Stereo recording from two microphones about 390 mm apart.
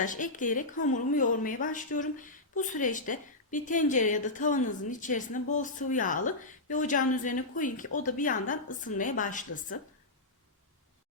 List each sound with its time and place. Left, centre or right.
0.0 s speech: centre